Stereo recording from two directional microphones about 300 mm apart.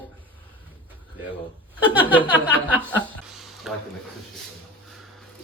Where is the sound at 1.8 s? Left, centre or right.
Centre.